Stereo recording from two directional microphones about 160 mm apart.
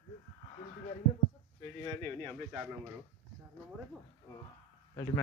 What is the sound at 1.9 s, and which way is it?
Speech, 15° left (ahead or behind).